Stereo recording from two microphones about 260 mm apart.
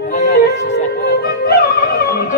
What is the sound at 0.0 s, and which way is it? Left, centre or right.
Music, left.